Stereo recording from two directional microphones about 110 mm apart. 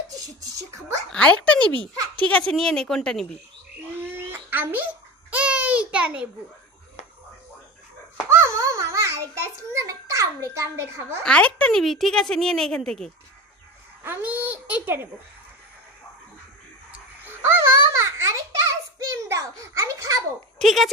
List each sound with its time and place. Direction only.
0.2 s speech: 35° right (ahead or behind)
1.1 s a child's voice: 10° left (ahead or behind)
4.3 s a sound: 20° right (ahead or behind)
8.3 s a child's voice: 25° right (ahead or behind)
11.2 s speech: 10° left (ahead or behind)
14.0 s a child's voice: 20° right (ahead or behind)
16.9 s babbling: 20° right (ahead or behind)
19.2 s a child's voice: 25° right (ahead or behind)
20.5 s speech: centre (ahead or behind)